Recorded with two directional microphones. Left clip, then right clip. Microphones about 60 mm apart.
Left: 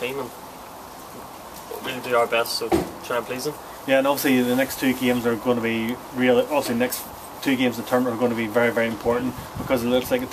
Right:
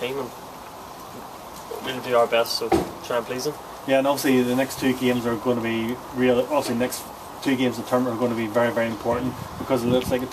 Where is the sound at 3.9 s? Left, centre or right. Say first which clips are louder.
Left 1 dB; left.